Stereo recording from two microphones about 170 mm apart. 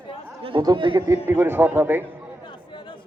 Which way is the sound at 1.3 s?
10° right (ahead or behind).